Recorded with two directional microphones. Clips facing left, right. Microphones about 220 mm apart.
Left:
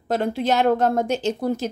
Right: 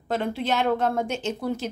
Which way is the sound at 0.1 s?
40° left (ahead or behind).